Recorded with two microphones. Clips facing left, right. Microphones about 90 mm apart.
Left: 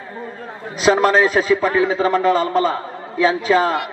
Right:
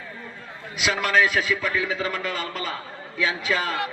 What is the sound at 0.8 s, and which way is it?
A man's voice, 35° left (ahead or behind).